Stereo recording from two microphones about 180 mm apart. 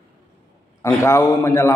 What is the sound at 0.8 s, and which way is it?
Speech, 15° left (ahead or behind).